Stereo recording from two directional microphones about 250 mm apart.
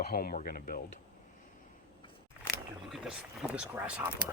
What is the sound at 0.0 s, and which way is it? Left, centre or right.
Speech, left.